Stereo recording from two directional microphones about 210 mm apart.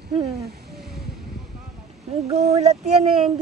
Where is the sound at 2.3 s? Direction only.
30° right (ahead or behind).